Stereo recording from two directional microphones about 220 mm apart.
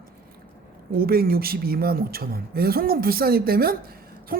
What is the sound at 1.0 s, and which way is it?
Speech, 45° right (ahead or behind).